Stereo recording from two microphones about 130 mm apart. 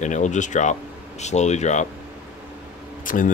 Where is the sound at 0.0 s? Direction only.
70° left (ahead or behind).